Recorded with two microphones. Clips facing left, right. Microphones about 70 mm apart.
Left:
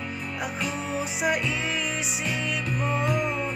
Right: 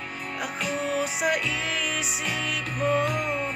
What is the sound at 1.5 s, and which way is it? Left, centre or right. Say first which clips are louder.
Music: even; centre.